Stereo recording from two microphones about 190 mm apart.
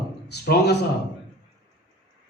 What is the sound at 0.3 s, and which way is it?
Speech, 60° left (ahead or behind).